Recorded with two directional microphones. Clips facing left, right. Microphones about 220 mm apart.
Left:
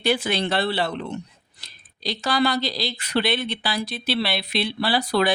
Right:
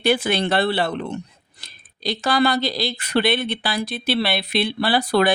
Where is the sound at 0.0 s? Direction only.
55° right (ahead or behind).